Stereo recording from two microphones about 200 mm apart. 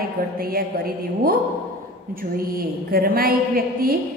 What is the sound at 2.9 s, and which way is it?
A woman's voice, 45° right (ahead or behind).